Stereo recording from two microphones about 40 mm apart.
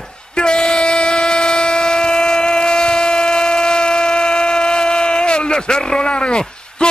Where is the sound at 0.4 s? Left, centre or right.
Centre.